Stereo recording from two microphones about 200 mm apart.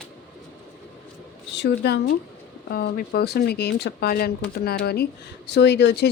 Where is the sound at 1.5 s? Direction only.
60° left (ahead or behind).